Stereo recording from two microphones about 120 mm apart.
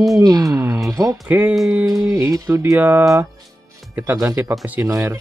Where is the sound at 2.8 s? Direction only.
15° right (ahead or behind).